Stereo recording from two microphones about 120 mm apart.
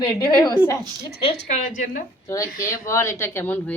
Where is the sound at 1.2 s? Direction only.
70° left (ahead or behind); by 2.0 s 90° left.